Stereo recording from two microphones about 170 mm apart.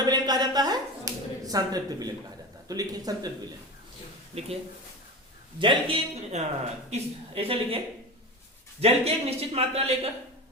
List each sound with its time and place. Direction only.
0.0 s a sound: 25° right (ahead or behind)
2.6 s speech: 20° right (ahead or behind)
4.3 s a man's voice: 35° right (ahead or behind)
5.5 s a man's voice: 30° right (ahead or behind)
8.8 s a man's voice: 35° right (ahead or behind)